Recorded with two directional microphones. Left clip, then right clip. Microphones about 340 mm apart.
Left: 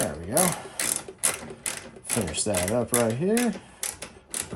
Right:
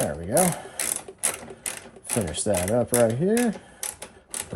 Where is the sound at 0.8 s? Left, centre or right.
Centre.